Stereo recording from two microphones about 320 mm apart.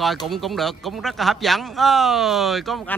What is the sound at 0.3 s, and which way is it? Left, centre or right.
Speech, centre.